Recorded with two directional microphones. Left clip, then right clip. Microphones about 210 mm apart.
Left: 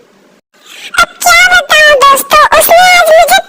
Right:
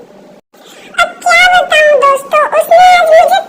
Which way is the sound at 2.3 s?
45° left (ahead or behind).